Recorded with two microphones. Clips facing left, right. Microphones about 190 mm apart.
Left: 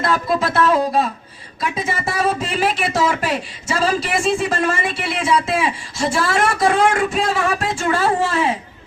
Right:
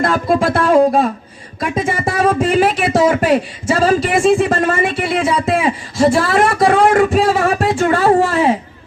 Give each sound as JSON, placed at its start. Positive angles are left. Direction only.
{"t": 0.0, "sound": "speech", "side_deg": -45}